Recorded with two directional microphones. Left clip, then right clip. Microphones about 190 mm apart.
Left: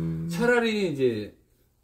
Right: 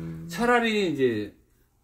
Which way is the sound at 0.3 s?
Centre (ahead or behind).